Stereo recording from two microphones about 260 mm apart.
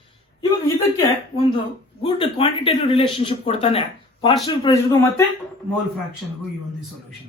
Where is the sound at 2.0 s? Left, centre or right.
Left.